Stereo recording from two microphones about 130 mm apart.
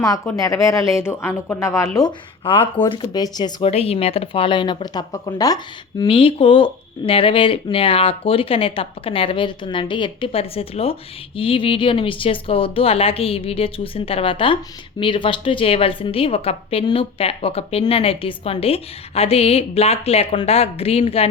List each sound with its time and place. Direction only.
0.0 s speech: 25° left (ahead or behind)
2.4 s speech: 45° left (ahead or behind)
3.7 s speech: 50° left (ahead or behind); by 5.5 s 30° left (ahead or behind)
6.1 s speech: 45° left (ahead or behind)